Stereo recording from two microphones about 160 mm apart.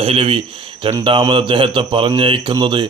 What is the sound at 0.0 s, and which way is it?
Speech, 35° right (ahead or behind).